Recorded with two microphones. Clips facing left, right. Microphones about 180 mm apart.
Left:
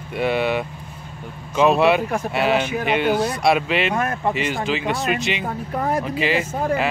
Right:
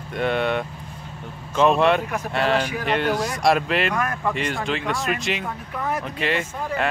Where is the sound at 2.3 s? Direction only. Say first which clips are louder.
Left 1 dB; 5° left (ahead or behind).